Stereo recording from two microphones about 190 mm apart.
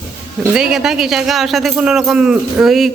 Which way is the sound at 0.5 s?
5° right (ahead or behind).